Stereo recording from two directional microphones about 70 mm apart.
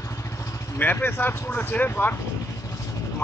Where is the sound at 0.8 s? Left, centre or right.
Left.